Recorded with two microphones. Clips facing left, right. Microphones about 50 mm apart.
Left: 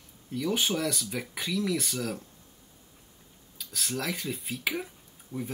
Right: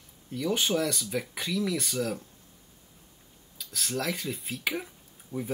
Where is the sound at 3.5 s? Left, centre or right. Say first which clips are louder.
Right 1 dB; centre.